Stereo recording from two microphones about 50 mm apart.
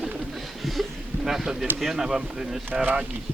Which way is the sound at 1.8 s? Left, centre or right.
Centre.